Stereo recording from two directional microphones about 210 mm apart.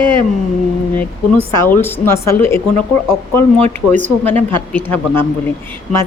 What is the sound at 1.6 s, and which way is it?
Speech, 10° left (ahead or behind).